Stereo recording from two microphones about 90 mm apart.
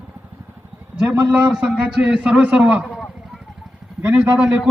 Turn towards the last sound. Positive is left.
turn(degrees=-10)  # may be behind; listen again after turning